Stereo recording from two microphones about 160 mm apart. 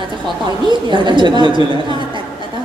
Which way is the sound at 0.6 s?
30° right (ahead or behind).